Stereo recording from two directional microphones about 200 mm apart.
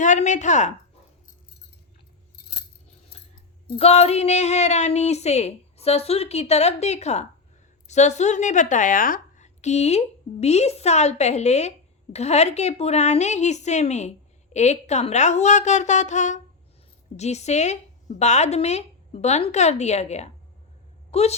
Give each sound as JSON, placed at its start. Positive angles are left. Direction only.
{"t": 0.0, "sound": "a woman's voice", "side_deg": 35}
{"t": 3.8, "sound": "a woman's voice", "side_deg": 30}